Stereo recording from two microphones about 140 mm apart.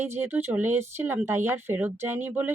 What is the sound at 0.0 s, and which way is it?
Speech, 15° right (ahead or behind).